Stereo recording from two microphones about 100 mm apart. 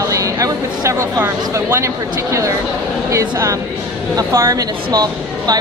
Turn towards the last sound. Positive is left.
turn(degrees=-40)  # may be behind; listen again after turning